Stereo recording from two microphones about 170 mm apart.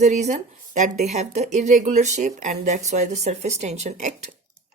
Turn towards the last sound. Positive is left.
turn(degrees=-45)  # may be behind; listen again after turning